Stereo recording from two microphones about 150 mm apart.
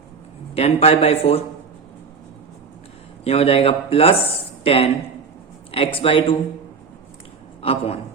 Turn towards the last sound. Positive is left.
turn(degrees=40)  # may be behind; listen again after turning